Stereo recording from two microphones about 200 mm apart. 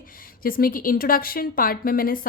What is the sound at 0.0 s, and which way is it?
A woman's voice, 45° left (ahead or behind).